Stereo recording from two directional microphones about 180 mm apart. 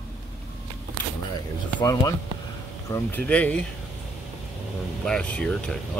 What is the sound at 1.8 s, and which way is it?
Speech, 25° left (ahead or behind).